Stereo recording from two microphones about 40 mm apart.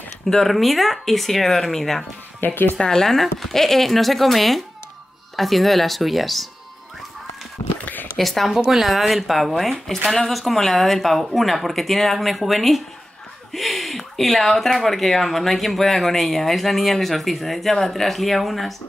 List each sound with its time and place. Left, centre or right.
0.3 s speech: centre
2.4 s speech: left
2.8 s speech: centre
7.8 s a sound: left
8.2 s speech: centre
8.5 s speech: centre